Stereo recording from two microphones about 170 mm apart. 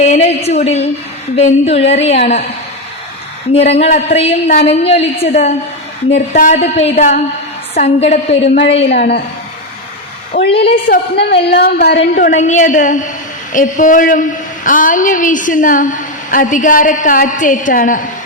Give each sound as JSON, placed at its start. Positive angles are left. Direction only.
{"t": 0.0, "sound": "a woman's voice", "side_deg": 40}
{"t": 3.5, "sound": "a woman's voice", "side_deg": 35}
{"t": 6.3, "sound": "a woman's voice", "side_deg": 45}
{"t": 8.7, "sound": "a woman's voice", "side_deg": 75}
{"t": 10.6, "sound": "a woman's voice", "side_deg": 65}
{"t": 12.3, "sound": "a woman's voice", "side_deg": 45}